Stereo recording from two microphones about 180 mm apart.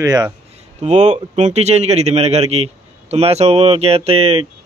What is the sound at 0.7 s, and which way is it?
Speech, 40° right (ahead or behind).